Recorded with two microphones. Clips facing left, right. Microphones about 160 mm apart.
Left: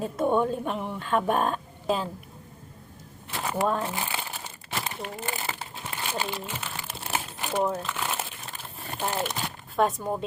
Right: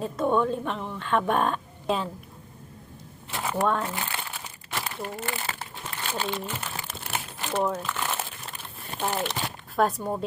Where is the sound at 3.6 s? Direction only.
5° left (ahead or behind).